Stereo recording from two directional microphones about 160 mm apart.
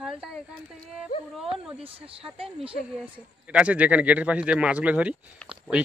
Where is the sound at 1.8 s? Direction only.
35° right (ahead or behind).